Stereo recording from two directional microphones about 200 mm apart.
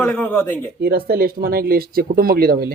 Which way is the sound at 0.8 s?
50° right (ahead or behind).